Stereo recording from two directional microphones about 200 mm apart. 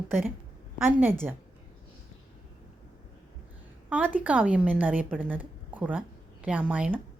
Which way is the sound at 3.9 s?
5° right (ahead or behind).